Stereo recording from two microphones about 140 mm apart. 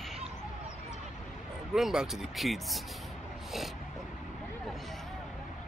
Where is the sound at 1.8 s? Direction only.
Centre (ahead or behind).